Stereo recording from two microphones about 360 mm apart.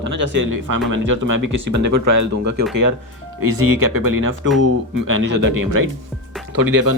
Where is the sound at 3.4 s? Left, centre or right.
Right.